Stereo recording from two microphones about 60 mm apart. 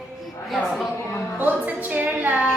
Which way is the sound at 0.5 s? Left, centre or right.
Centre.